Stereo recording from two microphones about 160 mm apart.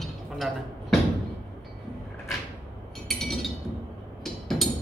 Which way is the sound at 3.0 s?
Centre (ahead or behind).